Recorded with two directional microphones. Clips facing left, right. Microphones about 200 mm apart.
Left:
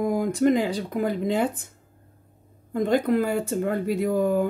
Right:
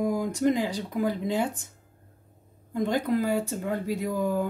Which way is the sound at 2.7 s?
55° left (ahead or behind).